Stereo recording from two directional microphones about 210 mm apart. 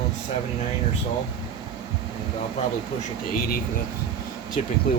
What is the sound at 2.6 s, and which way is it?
Speech, 30° left (ahead or behind).